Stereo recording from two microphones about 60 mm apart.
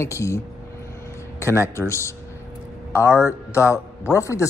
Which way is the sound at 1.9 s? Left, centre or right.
Left.